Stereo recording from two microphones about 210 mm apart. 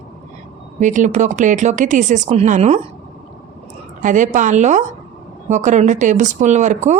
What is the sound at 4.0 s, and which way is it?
A woman's voice, 35° right (ahead or behind).